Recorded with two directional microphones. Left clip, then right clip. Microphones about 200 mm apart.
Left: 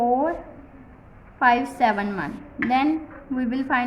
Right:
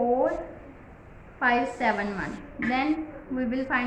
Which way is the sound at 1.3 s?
45° left (ahead or behind).